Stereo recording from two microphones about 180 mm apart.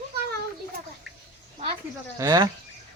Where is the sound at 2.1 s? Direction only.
20° right (ahead or behind).